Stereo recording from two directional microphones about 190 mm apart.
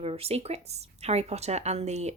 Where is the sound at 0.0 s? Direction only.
30° right (ahead or behind).